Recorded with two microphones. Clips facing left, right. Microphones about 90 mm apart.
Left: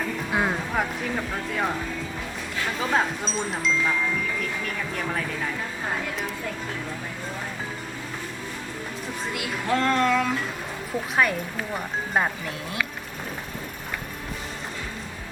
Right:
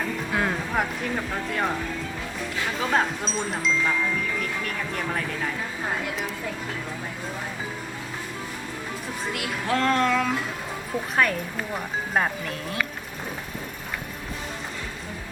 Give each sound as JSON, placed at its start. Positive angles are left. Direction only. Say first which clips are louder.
{"t": 0.3, "sound": "music", "louder": "left 2 dB", "side_deg": 15}
{"t": 0.7, "sound": "speech", "louder": "even", "side_deg": 0}
{"t": 2.8, "sound": "speech", "louder": "even", "side_deg": 0}
{"t": 9.3, "sound": "speech", "louder": "left 1 dB", "side_deg": 0}